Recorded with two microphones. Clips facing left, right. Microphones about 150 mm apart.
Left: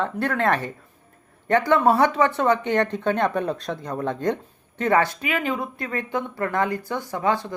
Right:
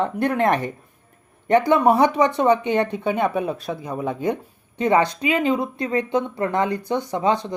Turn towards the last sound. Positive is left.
turn(degrees=-20)  # may be behind; listen again after turning